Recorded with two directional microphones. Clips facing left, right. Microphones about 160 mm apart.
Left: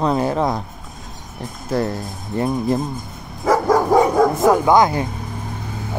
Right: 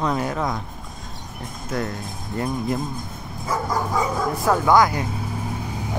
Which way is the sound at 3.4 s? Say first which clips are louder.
Left 9 dB; 75° left (ahead or behind).